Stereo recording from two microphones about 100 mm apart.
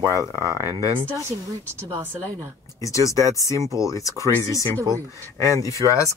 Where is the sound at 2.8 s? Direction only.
30° left (ahead or behind).